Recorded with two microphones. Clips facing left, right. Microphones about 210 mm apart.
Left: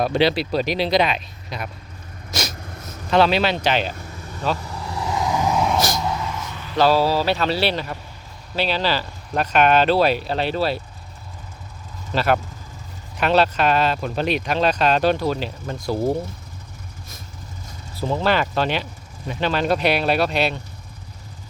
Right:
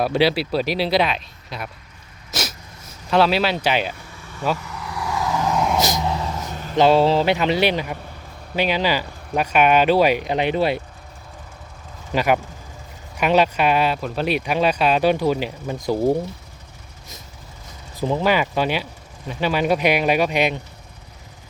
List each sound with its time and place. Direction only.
0.0 s speech: 5° right (ahead or behind)
2.3 s sneeze: 5° right (ahead or behind)
2.8 s speech: 5° right (ahead or behind)
4.0 s vehicle: 40° left (ahead or behind); by 5.5 s 15° left (ahead or behind)
5.5 s vehicle: centre (ahead or behind)
5.8 s a sound: 20° right (ahead or behind); by 6.7 s 45° right (ahead or behind)
6.7 s speech: 25° right (ahead or behind)
12.1 s speech: 15° right (ahead or behind)
17.9 s speech: 15° right (ahead or behind)